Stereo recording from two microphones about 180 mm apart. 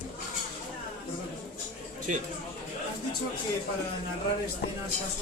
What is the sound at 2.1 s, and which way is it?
Speech, 45° right (ahead or behind).